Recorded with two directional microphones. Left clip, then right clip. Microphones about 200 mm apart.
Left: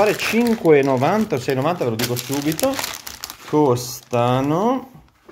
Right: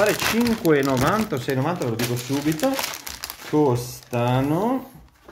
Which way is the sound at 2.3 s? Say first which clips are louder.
Left 2 dB; 25° left (ahead or behind).